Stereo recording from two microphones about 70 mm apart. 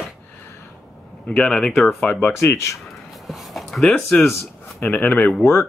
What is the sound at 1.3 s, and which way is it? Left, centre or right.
Speech, centre.